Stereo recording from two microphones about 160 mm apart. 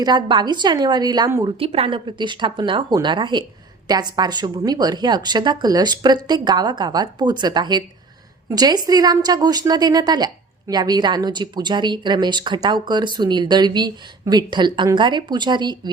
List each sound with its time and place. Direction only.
0.0 s a woman's voice: 25° right (ahead or behind)
1.5 s a woman's voice: 35° right (ahead or behind)